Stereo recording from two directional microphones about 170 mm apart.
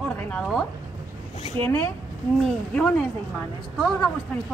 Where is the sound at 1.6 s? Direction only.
15° left (ahead or behind).